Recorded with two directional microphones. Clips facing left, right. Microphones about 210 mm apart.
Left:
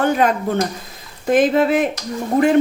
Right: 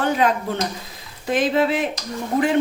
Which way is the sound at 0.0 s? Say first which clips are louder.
Left 3 dB; 50° left (ahead or behind).